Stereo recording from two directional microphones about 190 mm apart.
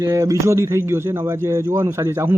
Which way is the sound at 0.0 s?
15° right (ahead or behind).